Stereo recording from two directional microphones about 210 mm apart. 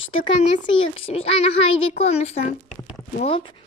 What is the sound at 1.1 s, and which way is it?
A child's voice, 30° left (ahead or behind).